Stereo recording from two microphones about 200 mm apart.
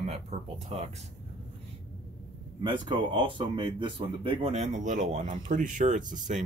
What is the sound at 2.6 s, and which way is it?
Speech, 25° right (ahead or behind).